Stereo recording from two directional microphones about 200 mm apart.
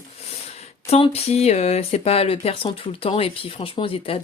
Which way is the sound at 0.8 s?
30° left (ahead or behind).